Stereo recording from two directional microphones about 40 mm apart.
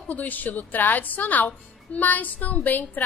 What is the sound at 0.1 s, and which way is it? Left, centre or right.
A woman's voice, left.